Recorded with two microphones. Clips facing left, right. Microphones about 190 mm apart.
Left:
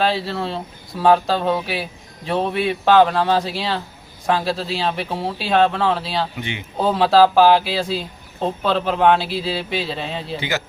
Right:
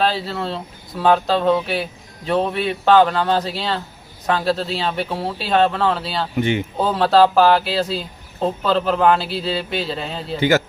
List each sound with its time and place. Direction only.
0.0 s speech: centre (ahead or behind)
6.3 s speech: 50° right (ahead or behind)
6.7 s speech: centre (ahead or behind)